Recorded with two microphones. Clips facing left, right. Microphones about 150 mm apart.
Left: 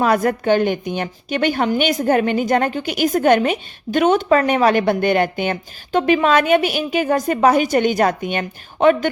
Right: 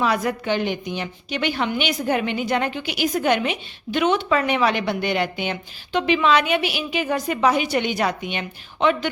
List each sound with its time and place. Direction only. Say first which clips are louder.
0.0 s a woman's voice: left 5 dB; 50° left (ahead or behind)